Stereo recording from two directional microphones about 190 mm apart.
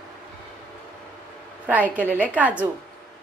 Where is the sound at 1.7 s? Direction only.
10° right (ahead or behind).